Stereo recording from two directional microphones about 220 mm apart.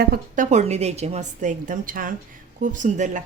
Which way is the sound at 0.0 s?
40° right (ahead or behind).